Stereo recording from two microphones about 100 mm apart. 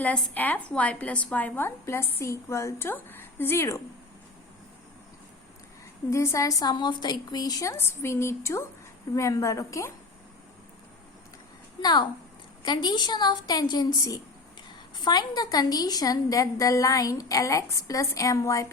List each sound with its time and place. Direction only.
0.0 s a woman's voice: 15° left (ahead or behind)
6.1 s a woman's voice: 30° left (ahead or behind)
11.8 s a woman's voice: 45° left (ahead or behind)
14.9 s a woman's voice: 45° left (ahead or behind); by 18.7 s 30° left (ahead or behind)